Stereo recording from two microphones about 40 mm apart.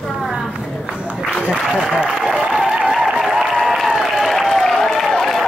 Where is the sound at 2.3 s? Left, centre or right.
Right.